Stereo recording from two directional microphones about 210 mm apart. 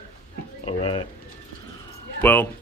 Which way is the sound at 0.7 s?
25° left (ahead or behind).